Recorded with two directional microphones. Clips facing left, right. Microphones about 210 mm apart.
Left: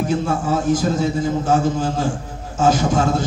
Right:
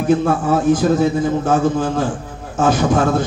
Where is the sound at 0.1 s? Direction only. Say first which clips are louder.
Right 9 dB; 55° right (ahead or behind).